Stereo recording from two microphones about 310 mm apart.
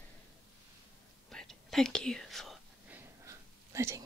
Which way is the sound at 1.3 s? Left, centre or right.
Centre.